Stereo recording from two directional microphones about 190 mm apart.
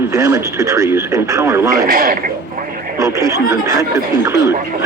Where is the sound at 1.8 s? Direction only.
50° right (ahead or behind).